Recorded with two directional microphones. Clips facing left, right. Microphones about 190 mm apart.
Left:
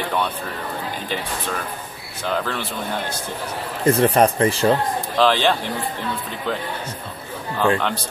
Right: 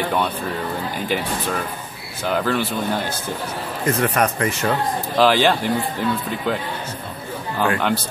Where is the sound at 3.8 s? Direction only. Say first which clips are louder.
Left 4 dB; 30° left (ahead or behind).